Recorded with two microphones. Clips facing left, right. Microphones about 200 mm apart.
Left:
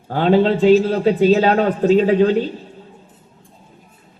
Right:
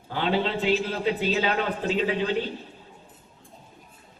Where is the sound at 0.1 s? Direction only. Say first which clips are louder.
Left 11 dB; 45° left (ahead or behind).